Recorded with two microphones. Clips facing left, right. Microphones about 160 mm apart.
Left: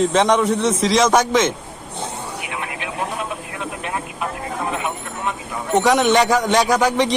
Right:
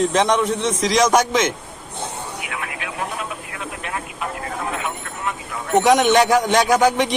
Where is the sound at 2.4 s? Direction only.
25° left (ahead or behind).